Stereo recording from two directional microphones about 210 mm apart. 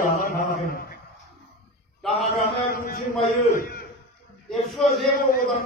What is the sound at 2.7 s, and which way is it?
A man's voice, 45° left (ahead or behind).